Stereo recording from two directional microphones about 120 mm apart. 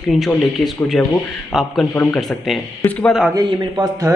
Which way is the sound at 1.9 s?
20° left (ahead or behind).